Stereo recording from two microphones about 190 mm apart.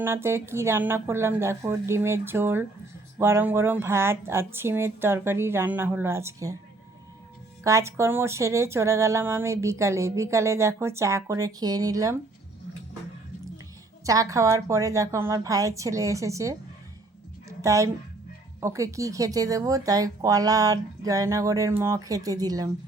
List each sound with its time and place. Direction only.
0.0 s speech: 15° right (ahead or behind)
7.6 s speech: 15° right (ahead or behind)
14.0 s speech: 15° right (ahead or behind)
17.6 s speech: 15° right (ahead or behind)